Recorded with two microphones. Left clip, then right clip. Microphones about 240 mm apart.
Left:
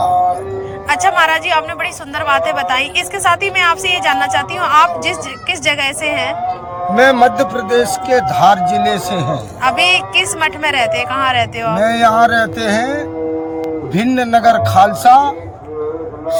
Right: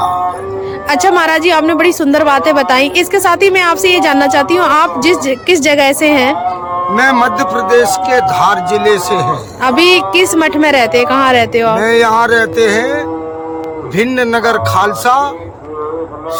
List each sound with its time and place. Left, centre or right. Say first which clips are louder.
0.9 s a woman's voice: right 2 dB; right
12.0 s a sound: even; right
12.5 s a man's voice: right 5 dB; centre